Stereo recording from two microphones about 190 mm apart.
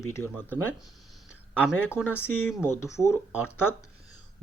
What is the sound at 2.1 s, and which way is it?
Speech, 10° left (ahead or behind).